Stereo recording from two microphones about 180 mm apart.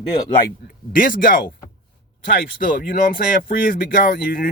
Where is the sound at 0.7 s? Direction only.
50° left (ahead or behind).